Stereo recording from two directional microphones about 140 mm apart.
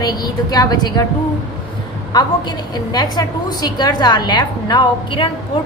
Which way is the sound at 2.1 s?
30° left (ahead or behind).